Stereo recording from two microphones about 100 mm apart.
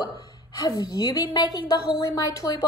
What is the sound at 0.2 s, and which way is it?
A woman's voice, 40° left (ahead or behind).